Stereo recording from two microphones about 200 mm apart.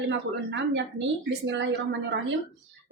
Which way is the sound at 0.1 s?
65° right (ahead or behind).